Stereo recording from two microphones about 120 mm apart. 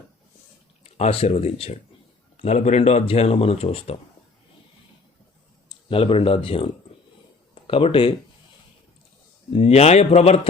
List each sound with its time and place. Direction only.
0.9 s speech: 60° left (ahead or behind)
5.6 s speech: 50° left (ahead or behind)
9.5 s speech: 50° left (ahead or behind)